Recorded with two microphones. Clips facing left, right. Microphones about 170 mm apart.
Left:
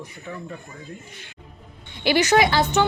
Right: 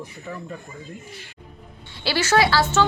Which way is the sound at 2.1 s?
15° left (ahead or behind).